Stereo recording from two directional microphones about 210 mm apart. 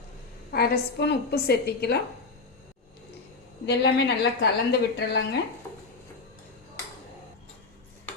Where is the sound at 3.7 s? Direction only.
50° left (ahead or behind).